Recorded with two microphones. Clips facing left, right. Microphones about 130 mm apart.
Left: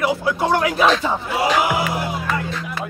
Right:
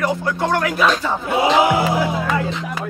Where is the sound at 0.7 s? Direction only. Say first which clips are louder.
Left 1 dB; 20° left (ahead or behind).